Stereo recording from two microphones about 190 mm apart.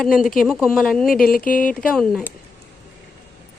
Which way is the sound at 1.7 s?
Centre (ahead or behind).